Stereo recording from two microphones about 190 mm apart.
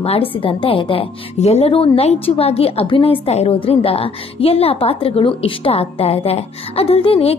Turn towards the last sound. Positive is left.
turn(degrees=30)  # may be behind; listen again after turning